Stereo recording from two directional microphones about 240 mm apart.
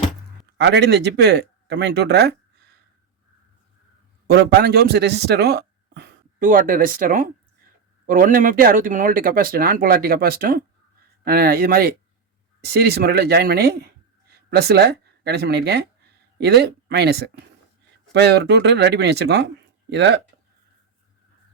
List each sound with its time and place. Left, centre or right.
0.5 s speech: right
4.3 s a man's voice: right